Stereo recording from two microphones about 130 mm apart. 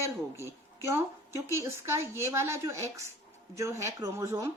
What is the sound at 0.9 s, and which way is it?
Speech, 20° right (ahead or behind).